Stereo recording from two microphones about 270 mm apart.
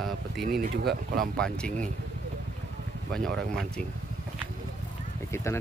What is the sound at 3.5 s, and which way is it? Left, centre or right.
Speech, centre.